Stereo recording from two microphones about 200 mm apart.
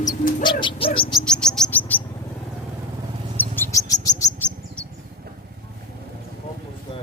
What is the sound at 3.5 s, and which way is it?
Chirp, 15° left (ahead or behind).